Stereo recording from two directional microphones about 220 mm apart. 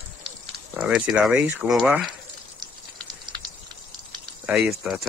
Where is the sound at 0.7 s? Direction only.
5° right (ahead or behind).